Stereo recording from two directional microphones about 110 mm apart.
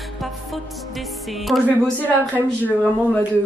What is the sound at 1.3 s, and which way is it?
Speech, centre (ahead or behind).